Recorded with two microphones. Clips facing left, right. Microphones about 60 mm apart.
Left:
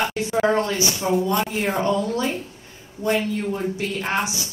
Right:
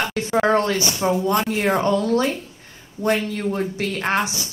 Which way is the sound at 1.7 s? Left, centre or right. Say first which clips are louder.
Right 5 dB; right.